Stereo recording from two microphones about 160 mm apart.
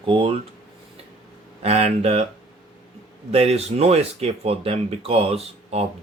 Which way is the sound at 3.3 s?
40° right (ahead or behind).